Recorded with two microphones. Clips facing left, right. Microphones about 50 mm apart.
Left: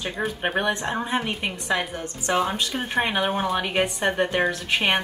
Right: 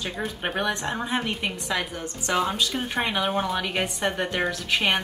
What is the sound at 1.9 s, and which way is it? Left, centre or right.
Speech, left.